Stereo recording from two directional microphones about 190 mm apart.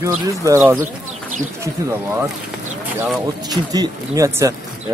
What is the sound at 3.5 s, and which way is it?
Speech, 20° right (ahead or behind).